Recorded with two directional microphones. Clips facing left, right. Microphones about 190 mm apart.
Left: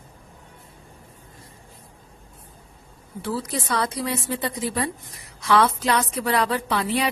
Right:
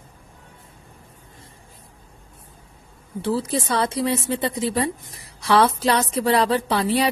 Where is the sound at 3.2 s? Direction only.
25° right (ahead or behind).